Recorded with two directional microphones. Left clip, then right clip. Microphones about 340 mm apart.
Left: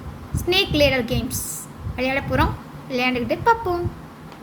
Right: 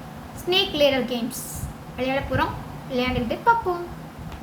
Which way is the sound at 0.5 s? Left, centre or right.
Left.